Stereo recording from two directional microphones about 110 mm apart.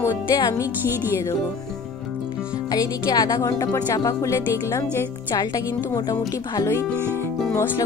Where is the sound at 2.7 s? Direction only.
35° left (ahead or behind).